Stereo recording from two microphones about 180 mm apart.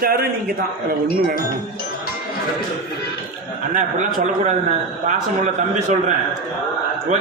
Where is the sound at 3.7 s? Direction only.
45° right (ahead or behind).